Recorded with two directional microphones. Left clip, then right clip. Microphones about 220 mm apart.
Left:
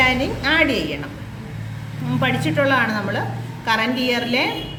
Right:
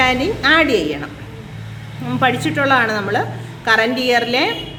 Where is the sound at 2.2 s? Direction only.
45° right (ahead or behind).